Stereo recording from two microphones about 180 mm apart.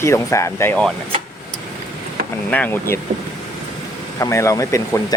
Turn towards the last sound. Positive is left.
turn(degrees=15)  # may be behind; listen again after turning